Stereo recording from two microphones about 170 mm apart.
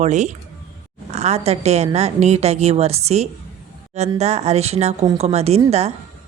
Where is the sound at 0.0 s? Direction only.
45° right (ahead or behind).